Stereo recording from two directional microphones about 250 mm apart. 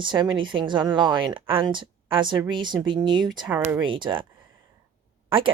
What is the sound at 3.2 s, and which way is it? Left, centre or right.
Speech, centre.